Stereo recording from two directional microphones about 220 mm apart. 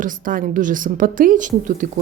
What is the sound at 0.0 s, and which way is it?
A woman's voice, 40° right (ahead or behind).